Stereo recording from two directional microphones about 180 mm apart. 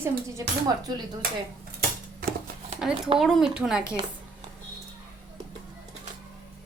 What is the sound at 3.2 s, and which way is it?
Speech, centre (ahead or behind).